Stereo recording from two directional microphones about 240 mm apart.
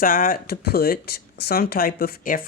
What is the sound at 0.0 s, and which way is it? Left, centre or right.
Speech, left.